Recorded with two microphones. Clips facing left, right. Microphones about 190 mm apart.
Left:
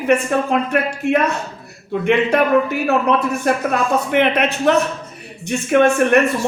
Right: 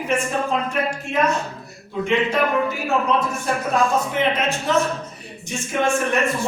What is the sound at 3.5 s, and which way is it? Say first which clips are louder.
A man's voice: left 3 dB; 65° left (ahead or behind).